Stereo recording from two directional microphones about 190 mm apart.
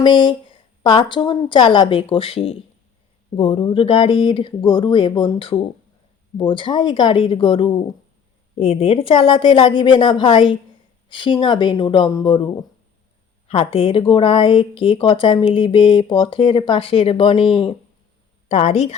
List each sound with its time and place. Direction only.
0.0 s speech: 25° left (ahead or behind)
13.5 s a woman's voice: 30° left (ahead or behind)